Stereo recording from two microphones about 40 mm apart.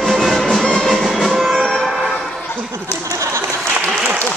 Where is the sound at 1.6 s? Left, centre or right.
Centre.